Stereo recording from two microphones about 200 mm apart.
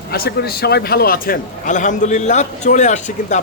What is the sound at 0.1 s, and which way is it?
A man's voice, 50° left (ahead or behind).